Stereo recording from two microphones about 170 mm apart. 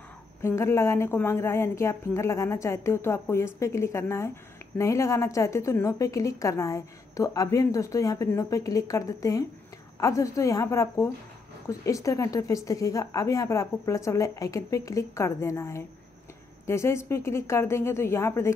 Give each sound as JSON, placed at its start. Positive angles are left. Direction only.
{"t": 0.4, "sound": "a woman's voice", "side_deg": 15}